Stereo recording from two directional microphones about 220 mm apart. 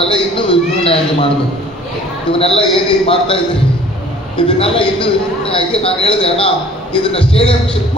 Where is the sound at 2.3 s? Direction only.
25° left (ahead or behind).